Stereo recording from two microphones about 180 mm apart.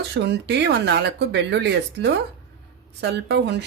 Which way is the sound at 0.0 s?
70° right (ahead or behind).